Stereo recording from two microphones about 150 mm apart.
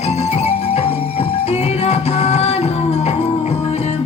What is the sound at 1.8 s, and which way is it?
Music, 45° left (ahead or behind).